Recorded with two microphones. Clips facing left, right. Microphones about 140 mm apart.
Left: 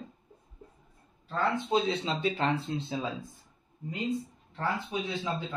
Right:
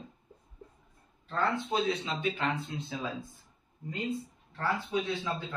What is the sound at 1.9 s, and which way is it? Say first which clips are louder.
Speech: left 2 dB; 30° left (ahead or behind).